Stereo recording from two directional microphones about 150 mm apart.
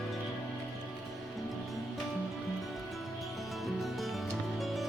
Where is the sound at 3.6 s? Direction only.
Centre (ahead or behind).